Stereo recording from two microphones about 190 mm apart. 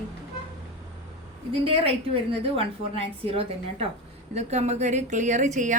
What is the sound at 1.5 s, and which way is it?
A woman's voice, 30° right (ahead or behind).